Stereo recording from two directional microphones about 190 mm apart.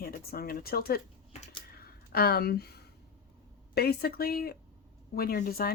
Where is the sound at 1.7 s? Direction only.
55° left (ahead or behind).